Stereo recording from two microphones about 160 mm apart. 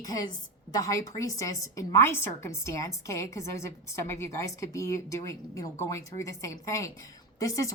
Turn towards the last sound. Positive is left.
turn(degrees=20)  # may be behind; listen again after turning